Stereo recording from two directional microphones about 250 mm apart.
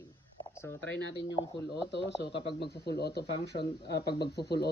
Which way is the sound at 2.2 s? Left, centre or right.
Centre.